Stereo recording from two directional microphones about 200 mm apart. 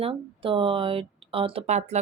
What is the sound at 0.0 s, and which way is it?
Speech, 25° right (ahead or behind).